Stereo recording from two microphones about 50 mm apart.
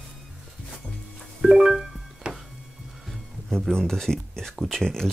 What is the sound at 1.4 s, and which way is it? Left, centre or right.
Music, centre.